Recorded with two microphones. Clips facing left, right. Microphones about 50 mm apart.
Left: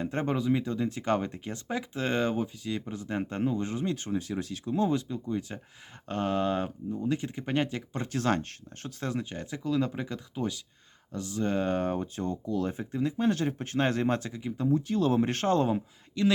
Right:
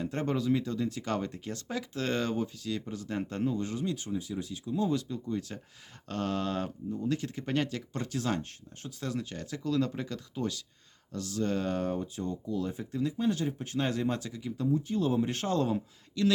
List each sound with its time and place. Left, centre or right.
0.0 s speech: left
3.9 s speech: left
4.9 s speech: left
8.1 s speech: left
9.0 s speech: left
12.7 s speech: left
13.1 s speech: left
14.7 s speech: left
15.7 s speech: left